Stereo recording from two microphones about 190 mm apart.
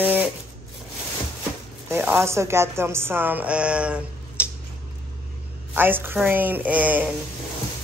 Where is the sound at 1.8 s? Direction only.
10° right (ahead or behind).